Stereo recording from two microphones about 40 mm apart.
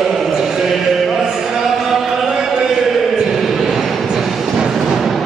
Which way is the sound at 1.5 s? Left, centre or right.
Centre.